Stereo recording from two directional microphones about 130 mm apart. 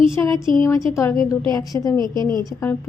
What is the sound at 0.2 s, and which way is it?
Speech, 15° left (ahead or behind).